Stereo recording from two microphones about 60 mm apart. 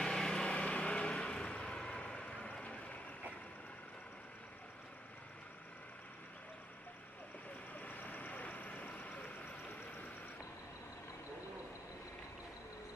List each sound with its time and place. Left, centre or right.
0.0 s vehicle: centre
7.7 s vehicle: left